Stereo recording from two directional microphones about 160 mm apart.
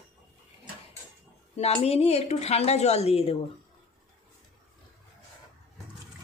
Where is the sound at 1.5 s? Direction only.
40° left (ahead or behind).